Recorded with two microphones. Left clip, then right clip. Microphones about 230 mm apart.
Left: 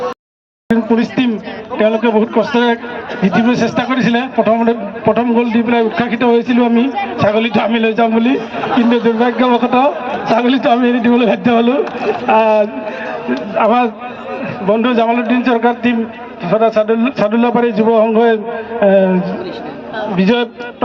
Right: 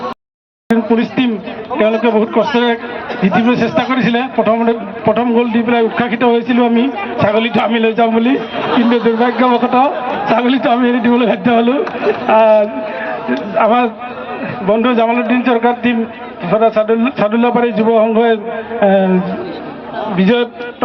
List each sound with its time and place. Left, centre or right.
0.9 s a man's voice: left